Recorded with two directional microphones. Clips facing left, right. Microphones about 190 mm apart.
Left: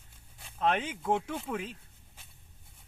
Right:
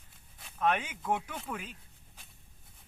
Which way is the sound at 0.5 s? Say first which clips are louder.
Left 1 dB; 25° left (ahead or behind).